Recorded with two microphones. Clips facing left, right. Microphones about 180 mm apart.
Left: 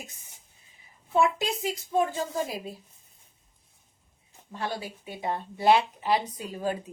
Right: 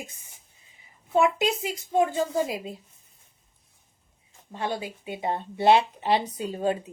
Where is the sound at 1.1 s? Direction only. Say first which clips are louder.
Right 3 dB; 20° right (ahead or behind).